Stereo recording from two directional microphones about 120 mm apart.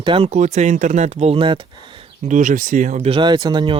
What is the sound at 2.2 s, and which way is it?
Speech, 90° right.